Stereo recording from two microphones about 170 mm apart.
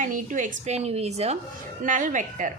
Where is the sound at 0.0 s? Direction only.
50° right (ahead or behind).